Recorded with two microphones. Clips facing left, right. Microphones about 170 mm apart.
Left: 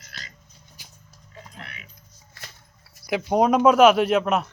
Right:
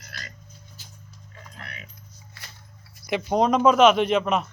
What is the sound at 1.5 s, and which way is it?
Keys jangling, 40° right (ahead or behind).